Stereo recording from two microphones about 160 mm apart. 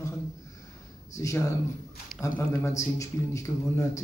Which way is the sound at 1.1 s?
20° left (ahead or behind).